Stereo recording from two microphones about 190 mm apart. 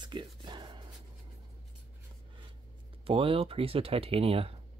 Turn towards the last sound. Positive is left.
turn(degrees=-30)  # may be behind; listen again after turning